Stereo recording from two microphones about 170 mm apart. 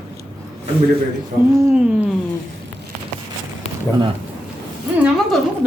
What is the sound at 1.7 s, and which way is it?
Speech, 5° right (ahead or behind).